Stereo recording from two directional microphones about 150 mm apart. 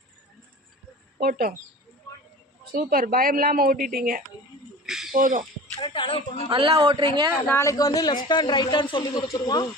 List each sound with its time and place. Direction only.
1.2 s speech: 80° right
2.1 s a sound: 20° left (ahead or behind)
2.7 s speech: 70° right (ahead or behind)
4.9 s speech: centre (ahead or behind)
5.1 s speech: 65° right (ahead or behind)
5.8 s a woman's voice: 35° left (ahead or behind)
6.5 s speech: 35° right (ahead or behind)
7.4 s speech: 20° left (ahead or behind)